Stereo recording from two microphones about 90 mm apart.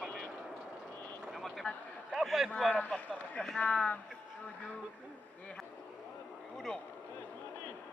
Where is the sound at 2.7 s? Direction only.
15° left (ahead or behind).